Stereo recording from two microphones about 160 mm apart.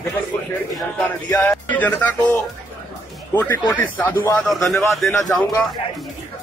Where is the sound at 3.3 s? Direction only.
10° left (ahead or behind).